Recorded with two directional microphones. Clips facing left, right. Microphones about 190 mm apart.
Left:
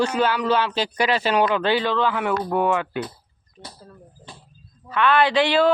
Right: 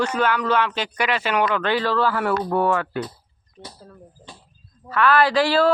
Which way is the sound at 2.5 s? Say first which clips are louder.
Even; 20° left (ahead or behind).